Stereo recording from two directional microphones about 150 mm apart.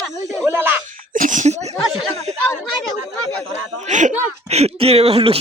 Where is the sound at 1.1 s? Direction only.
60° right (ahead or behind).